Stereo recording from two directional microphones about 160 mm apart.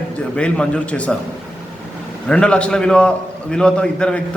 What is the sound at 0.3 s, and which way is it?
Speech, 5° left (ahead or behind).